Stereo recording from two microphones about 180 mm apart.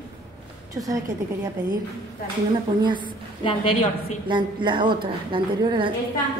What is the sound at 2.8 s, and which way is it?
Speech, 25° right (ahead or behind).